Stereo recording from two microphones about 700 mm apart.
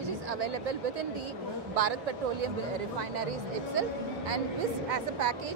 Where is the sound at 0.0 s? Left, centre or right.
Right.